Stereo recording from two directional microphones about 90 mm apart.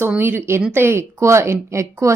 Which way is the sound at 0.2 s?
25° right (ahead or behind).